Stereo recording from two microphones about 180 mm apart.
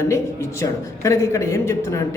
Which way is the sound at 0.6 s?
15° left (ahead or behind).